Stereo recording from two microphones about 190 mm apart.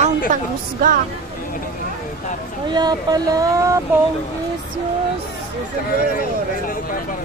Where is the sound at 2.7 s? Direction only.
20° right (ahead or behind).